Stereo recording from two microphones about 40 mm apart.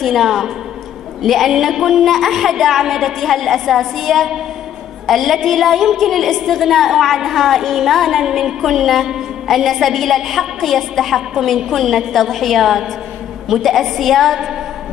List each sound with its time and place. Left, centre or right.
0.0 s a woman's voice: centre
8.2 s a woman's voice: centre